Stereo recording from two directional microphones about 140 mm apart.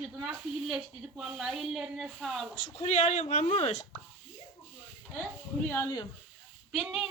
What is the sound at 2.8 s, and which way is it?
Speech, 55° left (ahead or behind).